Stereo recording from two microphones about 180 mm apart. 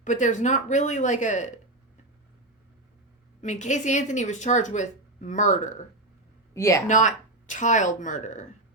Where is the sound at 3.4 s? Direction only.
40° left (ahead or behind).